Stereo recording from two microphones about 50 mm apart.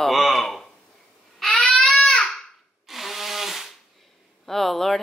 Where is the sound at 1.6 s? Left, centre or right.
Centre.